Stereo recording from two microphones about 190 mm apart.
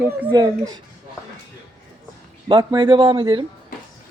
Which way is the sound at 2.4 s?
25° right (ahead or behind).